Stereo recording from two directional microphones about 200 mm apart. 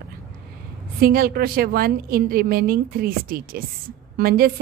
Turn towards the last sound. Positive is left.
turn(degrees=-50)  # may be behind; listen again after turning